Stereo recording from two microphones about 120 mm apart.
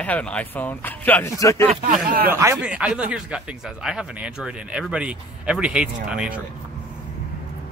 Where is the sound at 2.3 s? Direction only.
20° right (ahead or behind).